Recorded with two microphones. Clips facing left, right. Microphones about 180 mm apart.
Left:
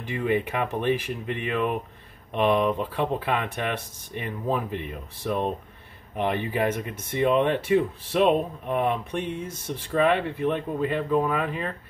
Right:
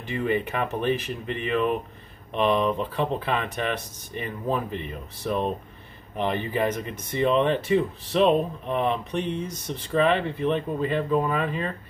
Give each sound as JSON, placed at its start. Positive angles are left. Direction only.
{"t": 0.0, "sound": "speech", "side_deg": 10}